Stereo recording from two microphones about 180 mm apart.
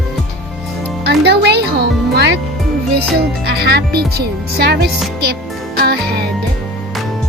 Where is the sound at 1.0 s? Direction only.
65° right (ahead or behind).